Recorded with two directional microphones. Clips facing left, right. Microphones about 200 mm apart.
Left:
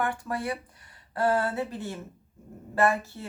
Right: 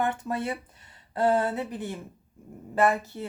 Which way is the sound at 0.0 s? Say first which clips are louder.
Right 2 dB; 20° right (ahead or behind).